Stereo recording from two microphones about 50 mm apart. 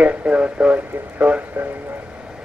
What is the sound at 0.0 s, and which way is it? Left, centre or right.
Speech, right.